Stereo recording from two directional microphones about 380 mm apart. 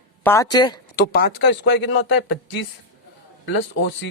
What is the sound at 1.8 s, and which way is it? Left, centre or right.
Speech, left.